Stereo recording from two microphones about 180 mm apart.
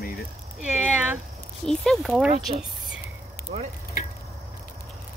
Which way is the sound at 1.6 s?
5° left (ahead or behind).